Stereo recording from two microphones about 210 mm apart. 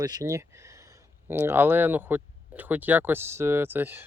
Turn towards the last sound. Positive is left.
turn(degrees=-10)  # may be behind; listen again after turning